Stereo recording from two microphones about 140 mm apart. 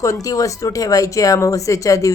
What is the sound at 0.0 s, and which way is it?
Speech, 25° left (ahead or behind).